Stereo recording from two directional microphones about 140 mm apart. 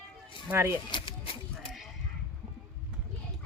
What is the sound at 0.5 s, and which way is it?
Speech, 20° right (ahead or behind).